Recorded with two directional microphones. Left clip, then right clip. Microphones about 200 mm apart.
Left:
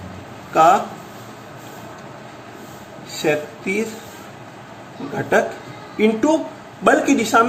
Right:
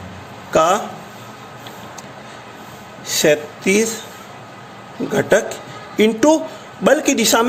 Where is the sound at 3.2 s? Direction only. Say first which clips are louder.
Right 5 dB; 50° right (ahead or behind).